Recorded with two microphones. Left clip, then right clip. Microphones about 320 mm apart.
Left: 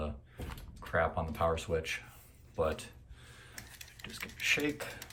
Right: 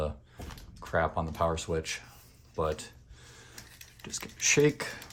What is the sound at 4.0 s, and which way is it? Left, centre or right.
Speech, centre.